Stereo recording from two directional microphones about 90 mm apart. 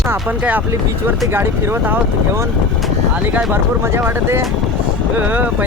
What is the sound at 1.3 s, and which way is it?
Speech, 25° right (ahead or behind).